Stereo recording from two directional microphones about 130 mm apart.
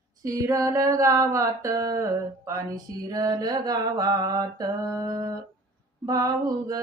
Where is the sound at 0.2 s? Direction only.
25° right (ahead or behind).